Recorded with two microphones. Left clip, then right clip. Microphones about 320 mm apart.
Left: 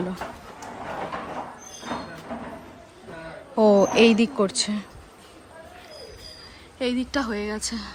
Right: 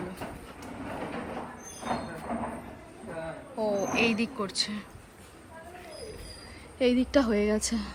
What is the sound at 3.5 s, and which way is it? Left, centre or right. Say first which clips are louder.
Speech: left 12 dB; left.